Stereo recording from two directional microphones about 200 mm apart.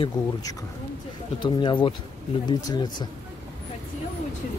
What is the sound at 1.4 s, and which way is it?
Speech, 25° left (ahead or behind).